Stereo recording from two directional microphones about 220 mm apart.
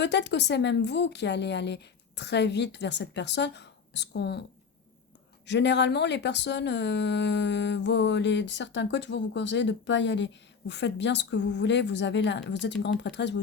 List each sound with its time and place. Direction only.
0.0 s speech: 50° left (ahead or behind)
5.5 s speech: 50° left (ahead or behind)